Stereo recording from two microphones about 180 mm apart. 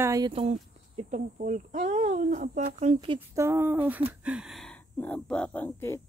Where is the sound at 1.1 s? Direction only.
45° right (ahead or behind).